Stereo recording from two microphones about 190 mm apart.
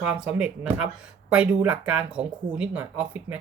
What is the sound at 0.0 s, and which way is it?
Speech, 5° right (ahead or behind).